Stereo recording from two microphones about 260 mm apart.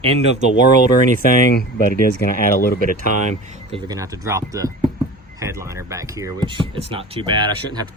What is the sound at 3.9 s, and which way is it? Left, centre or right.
Speech, centre.